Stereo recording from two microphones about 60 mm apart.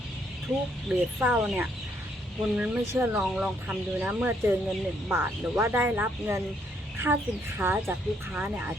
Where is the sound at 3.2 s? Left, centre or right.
Centre.